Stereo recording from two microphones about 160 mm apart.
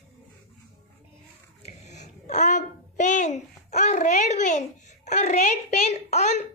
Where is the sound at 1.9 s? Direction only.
45° left (ahead or behind).